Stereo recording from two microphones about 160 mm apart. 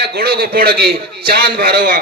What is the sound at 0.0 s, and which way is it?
A man's voice, 75° right (ahead or behind).